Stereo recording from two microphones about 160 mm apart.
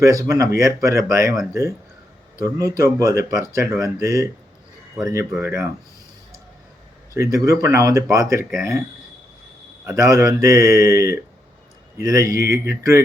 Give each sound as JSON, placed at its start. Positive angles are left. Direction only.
{"t": 0.0, "sound": "speech", "side_deg": -20}
{"t": 2.4, "sound": "speech", "side_deg": -20}
{"t": 5.3, "sound": "speech", "side_deg": -15}
{"t": 7.1, "sound": "speech", "side_deg": -20}
{"t": 9.8, "sound": "speech", "side_deg": -20}